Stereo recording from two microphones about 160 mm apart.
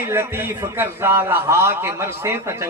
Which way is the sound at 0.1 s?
15° right (ahead or behind).